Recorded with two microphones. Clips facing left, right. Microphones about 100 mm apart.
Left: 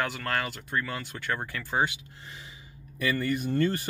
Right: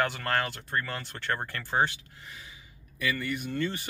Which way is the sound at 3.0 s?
35° left (ahead or behind).